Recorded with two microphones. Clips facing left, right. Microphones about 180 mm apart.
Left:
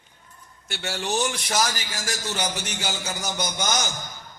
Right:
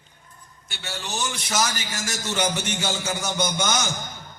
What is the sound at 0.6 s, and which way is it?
Speech, 70° left (ahead or behind).